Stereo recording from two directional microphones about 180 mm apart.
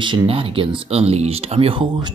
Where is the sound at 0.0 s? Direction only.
30° right (ahead or behind).